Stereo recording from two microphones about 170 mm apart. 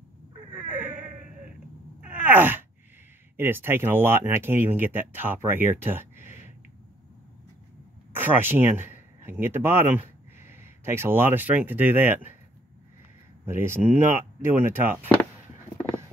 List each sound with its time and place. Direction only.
0.5 s vehicle: 10° right (ahead or behind)
2.0 s wail: 10° right (ahead or behind)
3.3 s speech: 15° right (ahead or behind)
8.1 s speech: 10° right (ahead or behind)
13.5 s speech: 15° right (ahead or behind)